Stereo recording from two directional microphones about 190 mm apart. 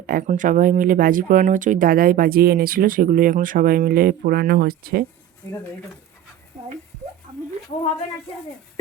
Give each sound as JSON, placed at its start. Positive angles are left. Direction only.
{"t": 0.0, "sound": "speech", "side_deg": -45}